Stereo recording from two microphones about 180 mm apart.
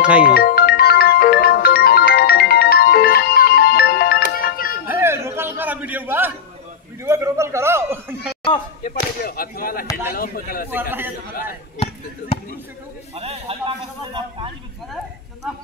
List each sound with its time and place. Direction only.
0.0 s speech: 5° right (ahead or behind)
0.3 s music: 60° left (ahead or behind)
4.8 s music: 15° right (ahead or behind)
7.1 s a man's voice: 15° right (ahead or behind)
8.8 s speech: 55° left (ahead or behind)
10.7 s a man's voice: 10° right (ahead or behind)
13.1 s speech: 35° right (ahead or behind)